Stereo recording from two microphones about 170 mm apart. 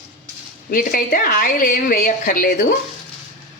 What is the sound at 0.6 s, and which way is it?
A woman's voice, 55° left (ahead or behind).